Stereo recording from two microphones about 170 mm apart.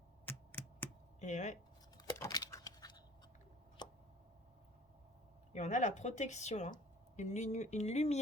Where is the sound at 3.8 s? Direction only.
25° left (ahead or behind).